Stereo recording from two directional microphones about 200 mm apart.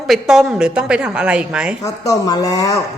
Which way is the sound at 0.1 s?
Centre (ahead or behind).